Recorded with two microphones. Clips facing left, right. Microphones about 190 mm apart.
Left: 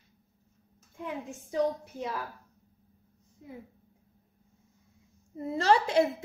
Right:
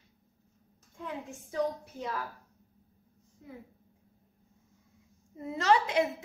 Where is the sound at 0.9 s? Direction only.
20° left (ahead or behind).